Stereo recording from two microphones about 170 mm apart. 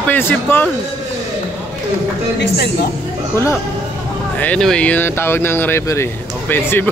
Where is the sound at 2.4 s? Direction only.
70° left (ahead or behind).